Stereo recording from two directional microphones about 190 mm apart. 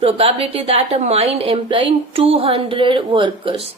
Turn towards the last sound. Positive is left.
turn(degrees=-30)  # may be behind; listen again after turning